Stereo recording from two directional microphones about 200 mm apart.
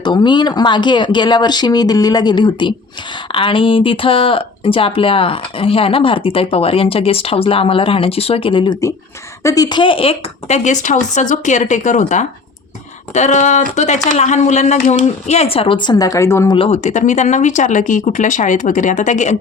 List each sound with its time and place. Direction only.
0.0 s speech: 20° left (ahead or behind)
16.6 s speech: 30° left (ahead or behind)